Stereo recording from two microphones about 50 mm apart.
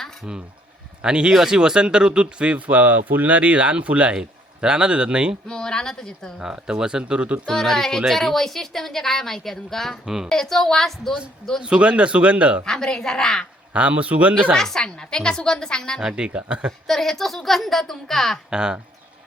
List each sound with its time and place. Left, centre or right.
1.0 s speech: centre
1.3 s speech: centre
5.5 s a woman's voice: centre
6.5 s speech: centre
7.4 s a woman's voice: centre
11.6 s speech: right
12.6 s a woman's voice: centre
13.7 s speech: right
14.5 s a woman's voice: centre
16.0 s speech: centre
16.8 s a woman's voice: centre
18.5 s speech: centre